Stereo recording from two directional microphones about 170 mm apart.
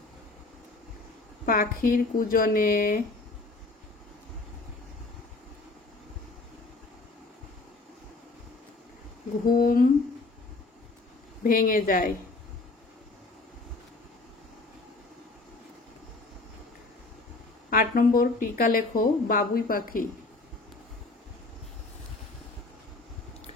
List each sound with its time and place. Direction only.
1.4 s speech: 60° left (ahead or behind)
9.5 s speech: 55° left (ahead or behind)
11.4 s speech: 55° left (ahead or behind)
17.6 s speech: 60° left (ahead or behind)